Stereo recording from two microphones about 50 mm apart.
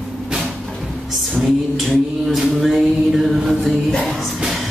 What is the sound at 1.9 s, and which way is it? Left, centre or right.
Mantra, centre.